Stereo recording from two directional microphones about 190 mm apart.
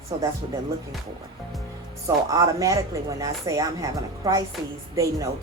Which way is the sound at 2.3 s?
20° right (ahead or behind).